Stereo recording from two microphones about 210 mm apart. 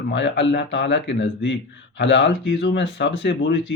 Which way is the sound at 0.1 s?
60° left (ahead or behind).